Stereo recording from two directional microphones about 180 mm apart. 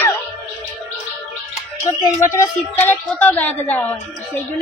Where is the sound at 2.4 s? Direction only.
10° left (ahead or behind).